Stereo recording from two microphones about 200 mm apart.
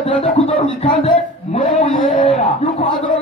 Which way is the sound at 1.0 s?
30° left (ahead or behind).